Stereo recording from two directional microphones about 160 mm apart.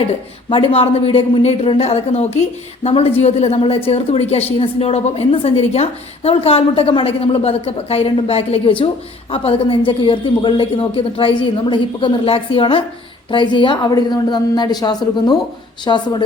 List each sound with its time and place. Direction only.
0.5 s a woman's voice: 35° left (ahead or behind)